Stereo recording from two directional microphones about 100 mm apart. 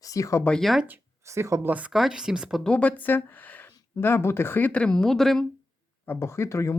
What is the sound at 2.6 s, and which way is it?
Speech, 15° left (ahead or behind).